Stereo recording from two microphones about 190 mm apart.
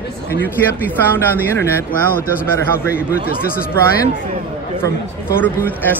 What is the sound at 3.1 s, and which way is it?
Speech, 50° left (ahead or behind).